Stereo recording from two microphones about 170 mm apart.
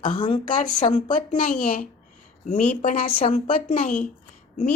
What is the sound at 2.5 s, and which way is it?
A woman's voice, 40° left (ahead or behind).